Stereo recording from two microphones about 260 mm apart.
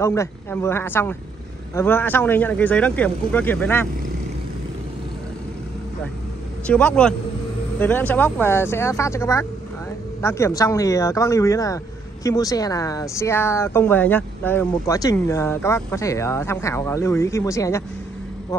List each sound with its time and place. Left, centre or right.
0.0 s speech: centre
6.7 s a man's voice: centre